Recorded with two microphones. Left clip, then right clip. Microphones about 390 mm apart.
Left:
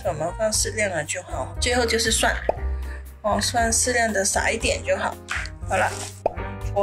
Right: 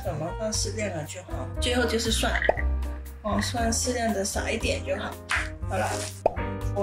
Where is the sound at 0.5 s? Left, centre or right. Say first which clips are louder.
Left 6 dB; centre.